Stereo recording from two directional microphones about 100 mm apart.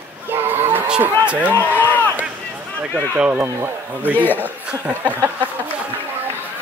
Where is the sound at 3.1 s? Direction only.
10° right (ahead or behind).